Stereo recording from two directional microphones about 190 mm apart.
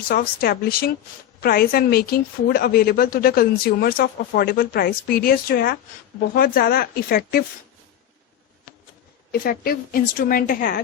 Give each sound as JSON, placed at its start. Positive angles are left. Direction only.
{"t": 0.1, "sound": "a woman's voice", "side_deg": 50}
{"t": 9.3, "sound": "a woman's voice", "side_deg": 50}